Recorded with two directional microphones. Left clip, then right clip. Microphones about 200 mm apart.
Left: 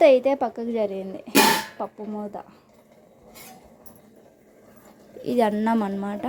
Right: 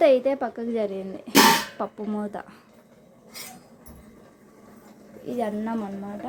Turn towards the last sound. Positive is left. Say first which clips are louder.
# left 7 dB
turn(degrees=30)  # may be behind; listen again after turning